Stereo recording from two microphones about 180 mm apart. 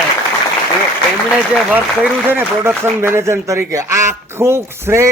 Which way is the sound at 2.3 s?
10° right (ahead or behind).